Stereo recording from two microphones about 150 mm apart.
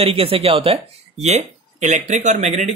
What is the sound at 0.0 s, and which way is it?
Speech, 40° right (ahead or behind).